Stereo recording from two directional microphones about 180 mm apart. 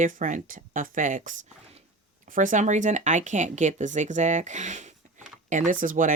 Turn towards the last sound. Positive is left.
turn(degrees=-45)  # may be behind; listen again after turning